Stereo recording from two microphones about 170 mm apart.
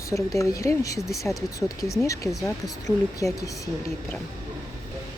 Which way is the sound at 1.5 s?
20° left (ahead or behind).